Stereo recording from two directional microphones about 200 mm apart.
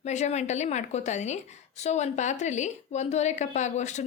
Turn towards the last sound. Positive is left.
turn(degrees=35)  # may be behind; listen again after turning